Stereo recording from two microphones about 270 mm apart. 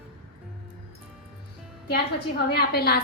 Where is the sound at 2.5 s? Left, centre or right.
Left.